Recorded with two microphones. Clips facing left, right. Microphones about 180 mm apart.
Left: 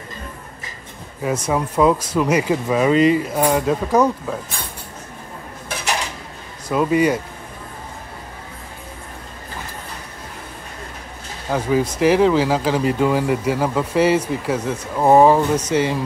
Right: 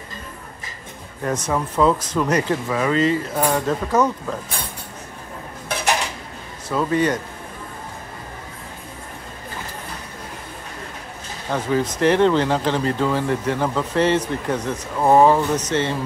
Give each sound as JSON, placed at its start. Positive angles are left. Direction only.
{"t": 1.2, "sound": "speech", "side_deg": 10}
{"t": 6.7, "sound": "speech", "side_deg": 10}
{"t": 11.5, "sound": "speech", "side_deg": 10}